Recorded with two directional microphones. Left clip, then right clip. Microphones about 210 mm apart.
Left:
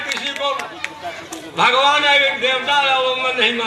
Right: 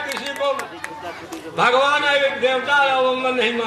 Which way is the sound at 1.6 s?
55° right (ahead or behind).